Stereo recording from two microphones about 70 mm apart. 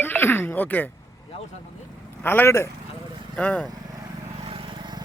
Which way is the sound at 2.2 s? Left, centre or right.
Left.